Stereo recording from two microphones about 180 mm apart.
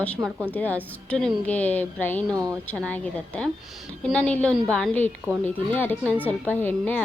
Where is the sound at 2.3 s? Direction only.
20° right (ahead or behind).